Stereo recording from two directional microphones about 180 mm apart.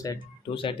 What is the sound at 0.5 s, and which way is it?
Speech, 30° left (ahead or behind).